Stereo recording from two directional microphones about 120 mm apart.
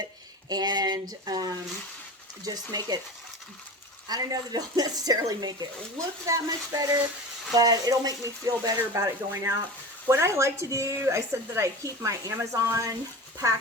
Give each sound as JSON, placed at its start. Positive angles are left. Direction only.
{"t": 0.0, "sound": "speech", "side_deg": -35}
{"t": 4.1, "sound": "speech", "side_deg": -30}